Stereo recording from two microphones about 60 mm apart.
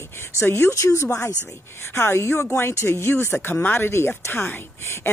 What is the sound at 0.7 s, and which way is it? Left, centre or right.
Speech, left.